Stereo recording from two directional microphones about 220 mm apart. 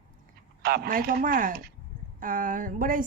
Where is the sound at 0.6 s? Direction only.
45° right (ahead or behind).